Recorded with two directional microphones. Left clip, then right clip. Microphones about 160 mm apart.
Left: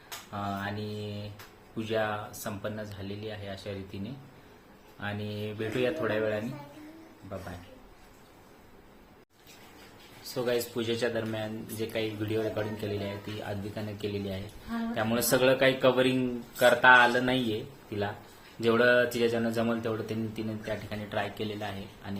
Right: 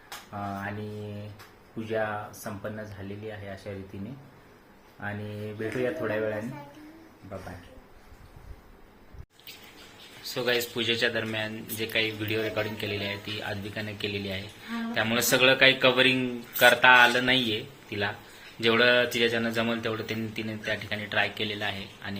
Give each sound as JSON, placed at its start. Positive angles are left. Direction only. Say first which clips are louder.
{"t": 0.3, "sound": "a man's voice", "louder": "even", "side_deg": 10}
{"t": 1.9, "sound": "speech", "louder": "right 1 dB", "side_deg": 5}
{"t": 5.0, "sound": "a man's voice", "louder": "right 1 dB", "side_deg": 15}
{"t": 5.5, "sound": "speech", "louder": "even", "side_deg": 0}
{"t": 10.3, "sound": "a man's voice", "louder": "right 3 dB", "side_deg": 10}